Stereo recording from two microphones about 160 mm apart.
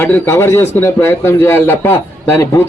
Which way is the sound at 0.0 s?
10° left (ahead or behind).